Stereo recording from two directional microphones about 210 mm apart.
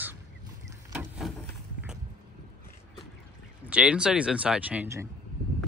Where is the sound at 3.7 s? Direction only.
5° right (ahead or behind).